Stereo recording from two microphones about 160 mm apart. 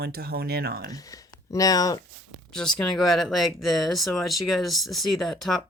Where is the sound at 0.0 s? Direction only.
75° right (ahead or behind).